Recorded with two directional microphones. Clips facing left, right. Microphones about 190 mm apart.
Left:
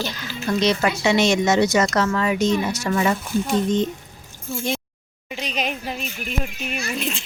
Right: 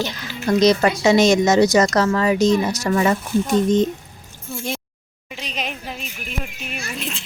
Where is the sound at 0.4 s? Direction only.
40° right (ahead or behind).